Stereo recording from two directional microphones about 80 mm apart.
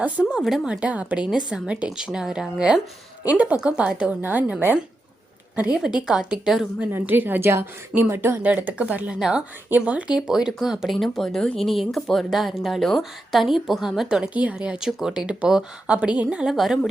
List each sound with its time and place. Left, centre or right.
0.0 s a woman's voice: centre
0.3 s a woman's voice: centre; by 4.5 s right
5.7 s a woman's voice: centre
6.9 s a woman's voice: right
9.1 s speech: centre
9.6 s a woman's voice: centre